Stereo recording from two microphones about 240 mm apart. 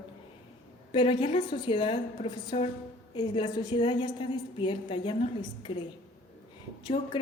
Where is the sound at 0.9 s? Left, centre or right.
Left.